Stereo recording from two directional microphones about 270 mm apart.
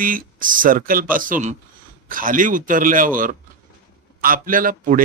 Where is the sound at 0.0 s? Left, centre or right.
Right.